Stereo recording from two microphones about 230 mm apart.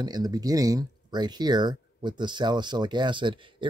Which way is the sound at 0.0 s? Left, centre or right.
Centre.